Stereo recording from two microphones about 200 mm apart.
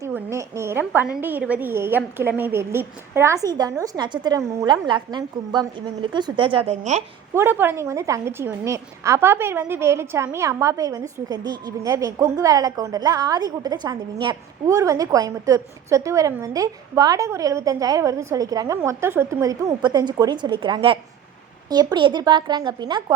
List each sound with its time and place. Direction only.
0.0 s speech: 15° right (ahead or behind); by 7.0 s 35° right (ahead or behind)
7.3 s speech: 10° right (ahead or behind)